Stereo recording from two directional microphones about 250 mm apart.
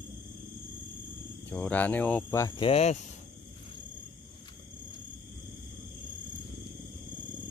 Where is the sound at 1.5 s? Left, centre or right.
Centre; by 3.0 s left.